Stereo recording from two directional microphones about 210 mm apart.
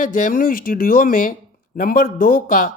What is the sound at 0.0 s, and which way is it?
Speech, 40° left (ahead or behind).